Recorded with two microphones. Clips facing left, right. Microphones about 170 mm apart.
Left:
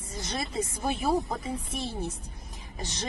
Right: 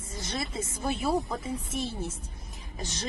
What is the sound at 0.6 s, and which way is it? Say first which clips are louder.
A woman's voice: left 1 dB; 20° left (ahead or behind).